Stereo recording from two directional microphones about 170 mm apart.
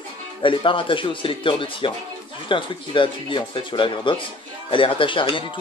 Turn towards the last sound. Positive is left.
turn(degrees=30)  # may be behind; listen again after turning